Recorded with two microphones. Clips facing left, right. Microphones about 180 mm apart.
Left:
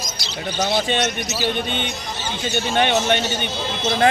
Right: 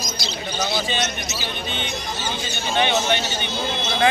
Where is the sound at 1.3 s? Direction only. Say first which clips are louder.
Left 7 dB; 45° left (ahead or behind).